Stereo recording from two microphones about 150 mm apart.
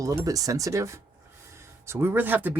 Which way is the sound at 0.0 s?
25° right (ahead or behind).